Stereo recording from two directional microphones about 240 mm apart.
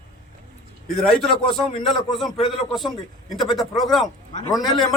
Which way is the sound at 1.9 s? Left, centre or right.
Centre.